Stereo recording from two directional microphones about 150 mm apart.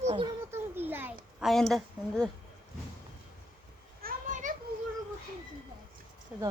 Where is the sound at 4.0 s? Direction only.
65° right (ahead or behind).